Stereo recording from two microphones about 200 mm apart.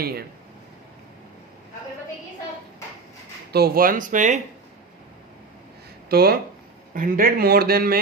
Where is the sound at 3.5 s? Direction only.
50° right (ahead or behind).